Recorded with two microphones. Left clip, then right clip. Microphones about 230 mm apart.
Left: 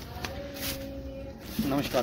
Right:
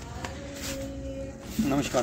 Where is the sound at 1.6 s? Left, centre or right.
Left.